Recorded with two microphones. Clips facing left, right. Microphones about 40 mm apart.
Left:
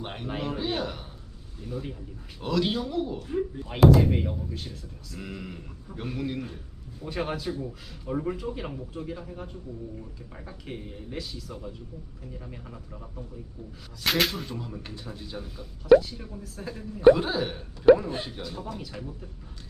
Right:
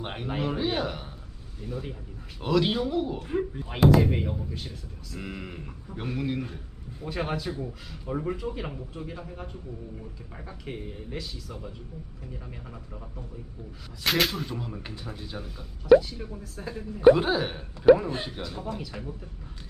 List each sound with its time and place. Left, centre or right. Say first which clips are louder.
0.0 s a man's voice: right 2 dB; centre
3.2 s speech: right 1 dB; right
3.6 s a man's voice: left 2 dB; centre
14.0 s speech: even; centre
14.6 s a man's voice: right 1 dB; centre